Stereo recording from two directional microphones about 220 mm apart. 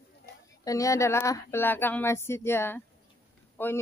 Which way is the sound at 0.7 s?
15° left (ahead or behind).